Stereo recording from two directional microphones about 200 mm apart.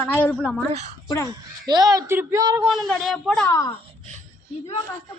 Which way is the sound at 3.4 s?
15° left (ahead or behind).